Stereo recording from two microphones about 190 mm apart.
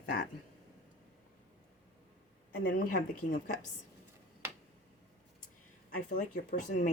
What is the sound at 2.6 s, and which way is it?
Speech, 65° left (ahead or behind).